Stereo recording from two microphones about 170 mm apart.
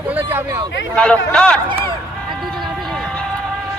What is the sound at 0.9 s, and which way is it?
Speech, 5° left (ahead or behind).